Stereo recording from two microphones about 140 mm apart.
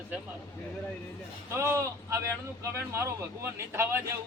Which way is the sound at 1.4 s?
20° right (ahead or behind).